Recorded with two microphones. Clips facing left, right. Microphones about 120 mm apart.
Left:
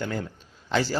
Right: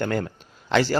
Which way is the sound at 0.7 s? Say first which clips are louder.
Right 5 dB; 70° right (ahead or behind).